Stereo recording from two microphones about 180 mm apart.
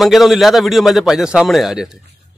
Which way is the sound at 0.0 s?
Centre (ahead or behind).